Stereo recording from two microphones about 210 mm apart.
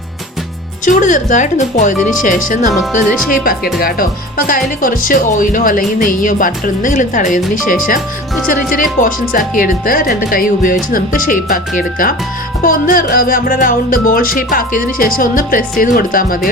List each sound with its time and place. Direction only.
0.9 s speech: 40° left (ahead or behind)
3.8 s speech: 45° left (ahead or behind)
12.6 s music: 40° left (ahead or behind)